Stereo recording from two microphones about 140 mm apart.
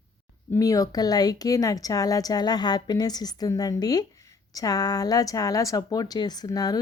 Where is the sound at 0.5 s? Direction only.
25° left (ahead or behind).